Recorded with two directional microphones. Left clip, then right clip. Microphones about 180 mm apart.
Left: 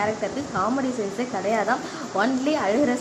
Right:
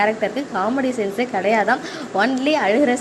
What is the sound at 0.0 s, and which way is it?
A woman's voice, 20° right (ahead or behind).